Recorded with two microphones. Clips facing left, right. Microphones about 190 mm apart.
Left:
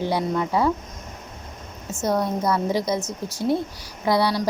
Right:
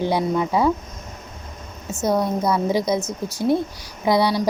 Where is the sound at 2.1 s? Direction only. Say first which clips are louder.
Right 2 dB; 10° right (ahead or behind).